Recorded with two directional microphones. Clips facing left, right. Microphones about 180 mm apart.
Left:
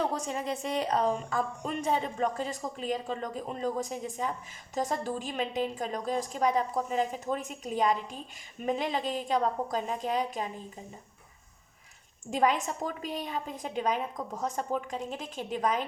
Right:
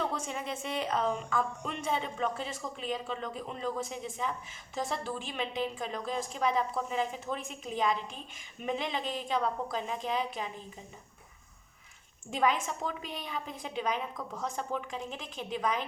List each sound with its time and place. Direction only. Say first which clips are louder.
0.0 s a woman's voice: left 3 dB; 40° left (ahead or behind)
12.3 s a woman's voice: left 2 dB; 40° left (ahead or behind)